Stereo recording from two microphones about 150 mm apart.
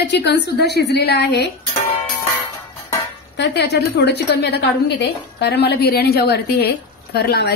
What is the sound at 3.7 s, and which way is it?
A woman's voice, 90° left.